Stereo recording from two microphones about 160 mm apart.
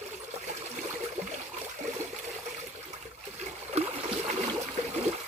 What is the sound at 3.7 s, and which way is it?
Boat, 35° right (ahead or behind).